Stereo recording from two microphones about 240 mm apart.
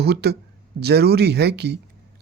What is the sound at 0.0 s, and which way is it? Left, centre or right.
Speech, right.